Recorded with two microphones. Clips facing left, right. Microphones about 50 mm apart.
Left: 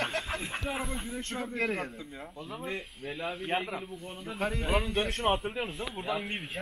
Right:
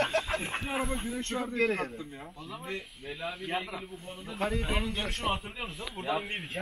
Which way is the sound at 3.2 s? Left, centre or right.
Centre.